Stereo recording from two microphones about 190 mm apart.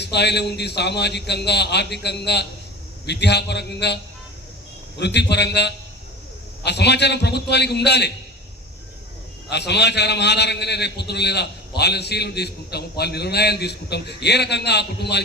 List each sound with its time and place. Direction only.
0.0 s a man's voice: 60° left (ahead or behind)
4.9 s a man's voice: 65° left (ahead or behind)
9.5 s a man's voice: 60° left (ahead or behind)